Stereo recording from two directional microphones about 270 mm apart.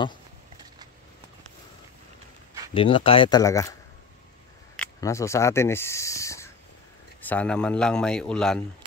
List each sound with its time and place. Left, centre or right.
2.7 s speech: centre
4.7 s a sound: centre
7.2 s a man's voice: centre